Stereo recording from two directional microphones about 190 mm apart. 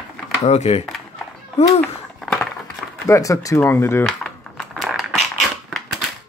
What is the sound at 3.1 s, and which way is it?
Speech, 15° left (ahead or behind).